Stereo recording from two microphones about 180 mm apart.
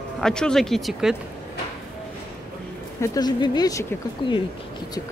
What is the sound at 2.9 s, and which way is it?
Speech, 20° left (ahead or behind).